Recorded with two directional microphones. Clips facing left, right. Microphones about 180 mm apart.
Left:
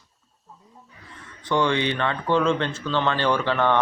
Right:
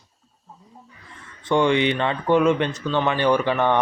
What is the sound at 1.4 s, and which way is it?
Speech, 20° right (ahead or behind).